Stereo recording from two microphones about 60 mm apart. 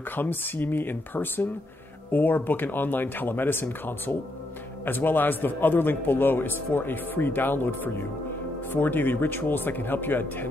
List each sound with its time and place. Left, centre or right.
0.1 s a man's voice: left